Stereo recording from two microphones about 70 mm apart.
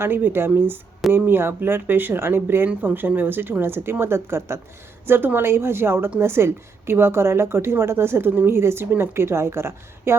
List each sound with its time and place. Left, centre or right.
0.0 s a woman's voice: right